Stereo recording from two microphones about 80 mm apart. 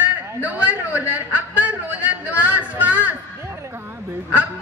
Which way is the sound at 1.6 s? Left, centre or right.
Centre.